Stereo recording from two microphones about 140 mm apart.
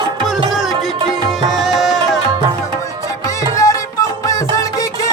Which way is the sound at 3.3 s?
25° left (ahead or behind).